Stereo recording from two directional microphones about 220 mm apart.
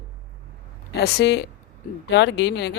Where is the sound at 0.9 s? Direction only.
45° left (ahead or behind).